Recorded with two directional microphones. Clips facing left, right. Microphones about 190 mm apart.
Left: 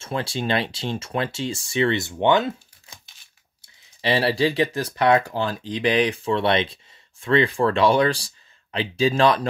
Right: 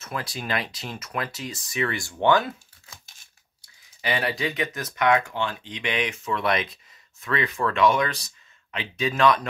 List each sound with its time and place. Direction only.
0.0 s speech: 25° left (ahead or behind)